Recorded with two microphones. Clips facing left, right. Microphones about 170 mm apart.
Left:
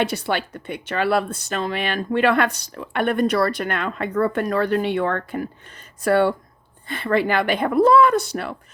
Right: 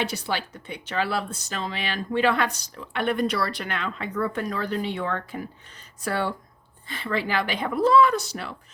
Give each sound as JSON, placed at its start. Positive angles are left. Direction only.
{"t": 0.0, "sound": "speech", "side_deg": 55}